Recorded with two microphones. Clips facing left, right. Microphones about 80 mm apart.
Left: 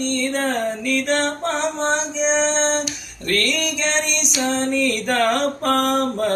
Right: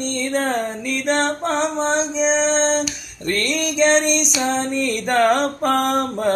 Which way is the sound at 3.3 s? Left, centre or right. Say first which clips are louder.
Even; right.